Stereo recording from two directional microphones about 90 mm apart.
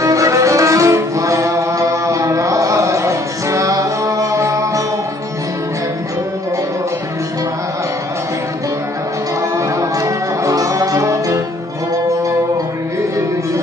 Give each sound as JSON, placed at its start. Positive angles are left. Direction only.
{"t": 0.0, "sound": "music", "side_deg": -35}
{"t": 9.6, "sound": "music", "side_deg": -35}